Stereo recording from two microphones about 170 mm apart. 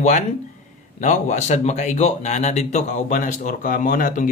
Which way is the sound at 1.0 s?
45° left (ahead or behind).